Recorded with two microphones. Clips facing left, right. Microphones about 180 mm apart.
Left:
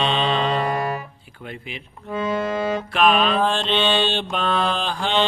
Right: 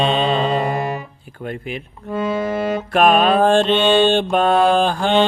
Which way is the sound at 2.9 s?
50° right (ahead or behind).